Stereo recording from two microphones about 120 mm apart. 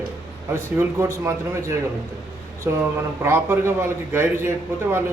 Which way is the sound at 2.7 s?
20° right (ahead or behind).